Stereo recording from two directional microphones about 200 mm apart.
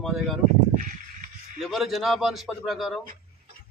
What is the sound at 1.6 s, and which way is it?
A man's voice, centre (ahead or behind).